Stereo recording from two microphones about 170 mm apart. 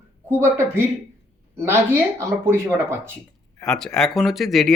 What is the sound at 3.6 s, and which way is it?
Speech, 5° left (ahead or behind).